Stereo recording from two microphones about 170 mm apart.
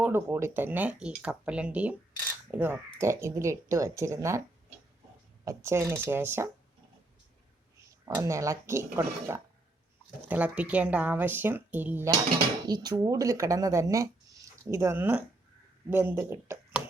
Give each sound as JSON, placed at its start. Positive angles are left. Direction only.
{"t": 0.0, "sound": "speech", "side_deg": -15}
{"t": 5.5, "sound": "speech", "side_deg": -15}
{"t": 8.0, "sound": "speech", "side_deg": -15}
{"t": 12.6, "sound": "speech", "side_deg": -25}